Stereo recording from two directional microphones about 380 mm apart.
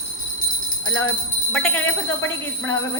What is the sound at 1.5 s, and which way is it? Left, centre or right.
Speech, centre.